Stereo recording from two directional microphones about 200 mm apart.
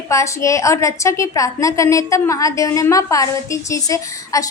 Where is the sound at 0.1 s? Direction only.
15° left (ahead or behind).